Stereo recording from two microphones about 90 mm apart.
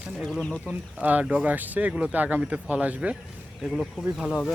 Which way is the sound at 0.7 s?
20° right (ahead or behind).